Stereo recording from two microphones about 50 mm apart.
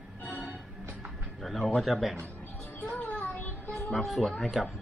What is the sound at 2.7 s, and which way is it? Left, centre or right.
Music, left.